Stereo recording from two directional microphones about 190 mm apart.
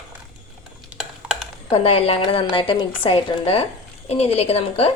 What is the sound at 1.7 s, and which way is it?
A woman's voice, 30° left (ahead or behind).